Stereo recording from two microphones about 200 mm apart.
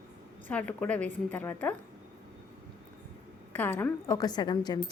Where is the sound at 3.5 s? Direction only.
10° left (ahead or behind).